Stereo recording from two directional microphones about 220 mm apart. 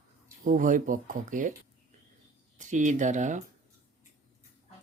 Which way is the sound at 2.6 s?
35° right (ahead or behind).